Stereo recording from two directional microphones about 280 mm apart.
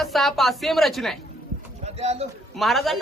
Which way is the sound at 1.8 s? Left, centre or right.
Right.